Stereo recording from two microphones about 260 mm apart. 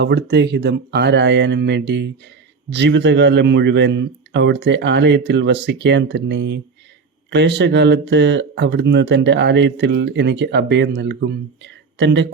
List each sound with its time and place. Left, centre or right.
0.0 s speech: right